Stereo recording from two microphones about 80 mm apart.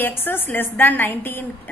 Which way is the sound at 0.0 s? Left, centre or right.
Left.